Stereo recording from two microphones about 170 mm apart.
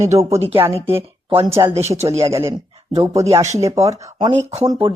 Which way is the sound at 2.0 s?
20° right (ahead or behind).